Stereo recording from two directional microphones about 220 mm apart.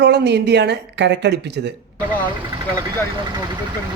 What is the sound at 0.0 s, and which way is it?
A woman's voice, 50° right (ahead or behind).